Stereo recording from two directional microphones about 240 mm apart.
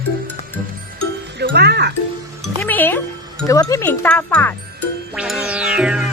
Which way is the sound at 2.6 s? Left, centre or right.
Centre.